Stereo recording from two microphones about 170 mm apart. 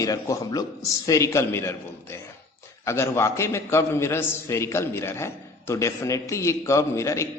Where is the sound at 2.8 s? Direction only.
15° left (ahead or behind).